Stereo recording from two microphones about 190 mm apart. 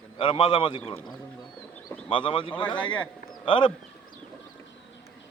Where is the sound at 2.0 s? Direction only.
25° left (ahead or behind).